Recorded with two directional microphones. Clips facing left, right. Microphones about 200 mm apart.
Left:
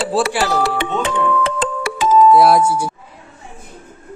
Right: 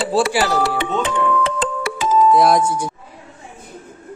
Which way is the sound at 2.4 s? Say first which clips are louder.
Left 2 dB; 5° left (ahead or behind).